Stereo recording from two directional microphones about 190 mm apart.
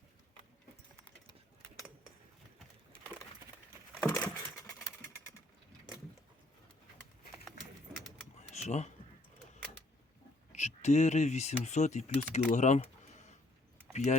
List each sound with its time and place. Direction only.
4.0 s a sound: 10° left (ahead or behind)
8.4 s typing: 35° left (ahead or behind)
10.5 s speech: 35° left (ahead or behind)